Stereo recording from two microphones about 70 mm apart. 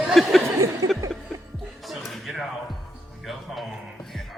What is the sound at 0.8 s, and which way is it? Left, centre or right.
Music, right.